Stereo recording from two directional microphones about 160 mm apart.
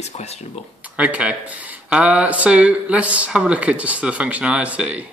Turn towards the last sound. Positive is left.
turn(degrees=-10)  # may be behind; listen again after turning